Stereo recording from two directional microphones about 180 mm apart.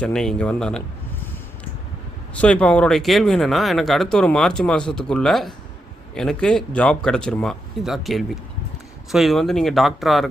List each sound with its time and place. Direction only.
0.0 s speech: 5° left (ahead or behind)
2.3 s speech: 5° left (ahead or behind)